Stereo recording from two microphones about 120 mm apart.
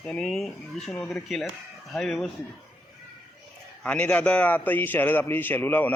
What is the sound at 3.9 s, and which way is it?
A man's voice, 10° left (ahead or behind).